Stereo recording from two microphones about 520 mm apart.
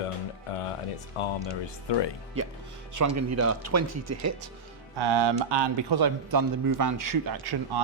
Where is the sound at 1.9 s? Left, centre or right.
Left.